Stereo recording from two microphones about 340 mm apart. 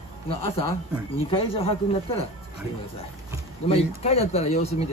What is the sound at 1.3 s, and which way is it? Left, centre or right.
Speech, centre.